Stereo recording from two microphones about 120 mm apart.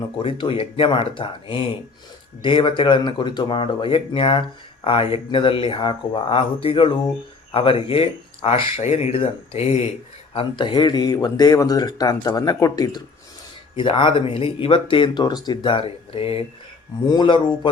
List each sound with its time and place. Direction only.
0.2 s speech: 45° left (ahead or behind)
8.8 s speech: 65° left (ahead or behind)
10.3 s speech: 45° left (ahead or behind)
13.7 s speech: 45° left (ahead or behind)
17.1 s speech: 40° left (ahead or behind)